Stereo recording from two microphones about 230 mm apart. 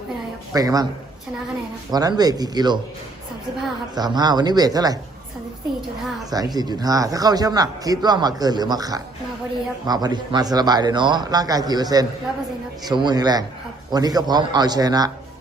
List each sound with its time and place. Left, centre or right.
0.5 s speech: centre
1.9 s speech: centre
3.9 s speech: centre
6.3 s speech: centre